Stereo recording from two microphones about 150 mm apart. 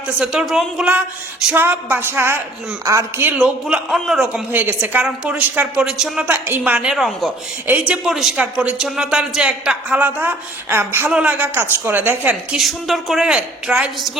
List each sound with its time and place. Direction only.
0.2 s speech: 5° right (ahead or behind)
3.3 s a woman's voice: 5° right (ahead or behind)